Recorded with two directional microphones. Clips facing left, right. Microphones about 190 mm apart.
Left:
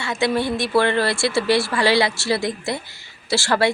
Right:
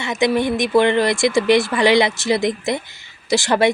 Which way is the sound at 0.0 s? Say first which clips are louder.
Right 3 dB; 20° right (ahead or behind).